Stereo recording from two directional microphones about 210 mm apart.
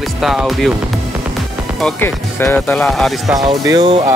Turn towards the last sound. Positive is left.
turn(degrees=-20)  # may be behind; listen again after turning